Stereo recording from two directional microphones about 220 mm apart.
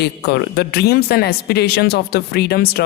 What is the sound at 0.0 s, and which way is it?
A man's voice, 50° left (ahead or behind).